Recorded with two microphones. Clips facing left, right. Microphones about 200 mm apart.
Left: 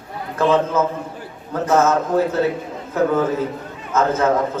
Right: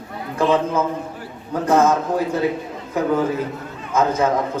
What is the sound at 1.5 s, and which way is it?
Speech, 15° right (ahead or behind).